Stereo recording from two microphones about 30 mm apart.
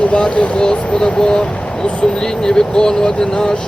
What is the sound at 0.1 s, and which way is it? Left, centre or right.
Speech, left.